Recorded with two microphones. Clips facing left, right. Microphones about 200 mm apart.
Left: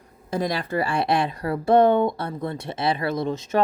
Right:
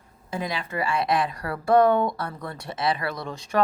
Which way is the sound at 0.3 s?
40° left (ahead or behind).